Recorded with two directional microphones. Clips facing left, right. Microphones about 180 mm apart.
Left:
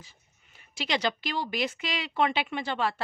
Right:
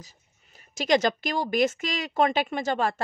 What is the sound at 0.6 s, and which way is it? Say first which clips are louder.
Speech: right 8 dB; 45° right (ahead or behind).